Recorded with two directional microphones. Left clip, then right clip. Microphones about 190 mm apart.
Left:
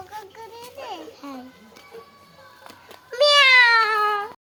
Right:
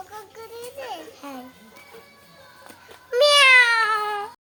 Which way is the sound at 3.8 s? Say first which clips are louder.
Left 2 dB; 25° left (ahead or behind).